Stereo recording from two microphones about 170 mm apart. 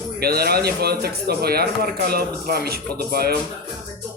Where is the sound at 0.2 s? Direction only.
65° right (ahead or behind).